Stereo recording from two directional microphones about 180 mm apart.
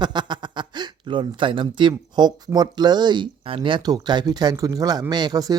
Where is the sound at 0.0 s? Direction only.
25° right (ahead or behind).